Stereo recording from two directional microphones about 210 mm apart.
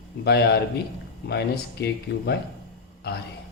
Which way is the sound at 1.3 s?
50° left (ahead or behind).